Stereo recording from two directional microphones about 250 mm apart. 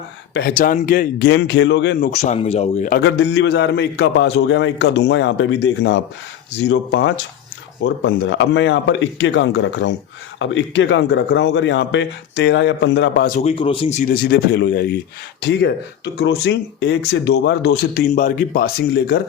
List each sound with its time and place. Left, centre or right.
0.3 s speech: left
2.0 s speech: left
3.0 s speech: left